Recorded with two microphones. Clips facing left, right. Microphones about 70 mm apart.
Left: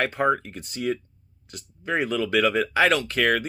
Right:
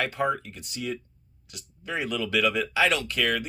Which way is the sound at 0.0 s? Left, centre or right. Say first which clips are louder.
Left 4 dB; left.